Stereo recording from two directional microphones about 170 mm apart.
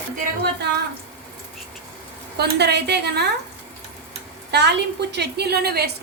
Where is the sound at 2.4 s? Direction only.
80° right.